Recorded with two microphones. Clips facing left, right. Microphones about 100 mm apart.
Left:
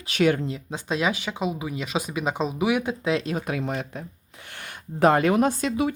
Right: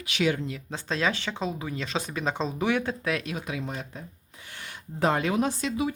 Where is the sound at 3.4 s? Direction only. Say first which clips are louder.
Left 6 dB; 65° left (ahead or behind).